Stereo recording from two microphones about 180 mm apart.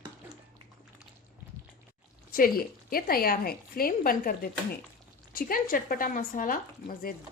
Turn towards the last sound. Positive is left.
turn(degrees=50)  # may be behind; listen again after turning